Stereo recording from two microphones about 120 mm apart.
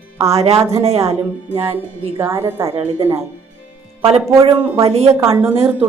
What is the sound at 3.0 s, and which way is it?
Speech, 60° right (ahead or behind).